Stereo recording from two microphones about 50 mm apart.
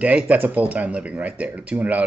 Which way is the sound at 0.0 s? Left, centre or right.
Right.